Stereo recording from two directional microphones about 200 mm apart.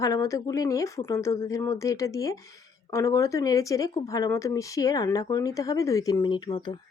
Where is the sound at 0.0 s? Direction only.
15° left (ahead or behind).